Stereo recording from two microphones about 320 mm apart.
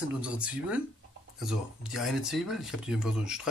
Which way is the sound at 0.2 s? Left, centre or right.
Centre.